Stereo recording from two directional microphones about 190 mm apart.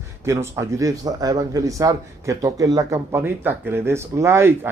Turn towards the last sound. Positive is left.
turn(degrees=-15)  # may be behind; listen again after turning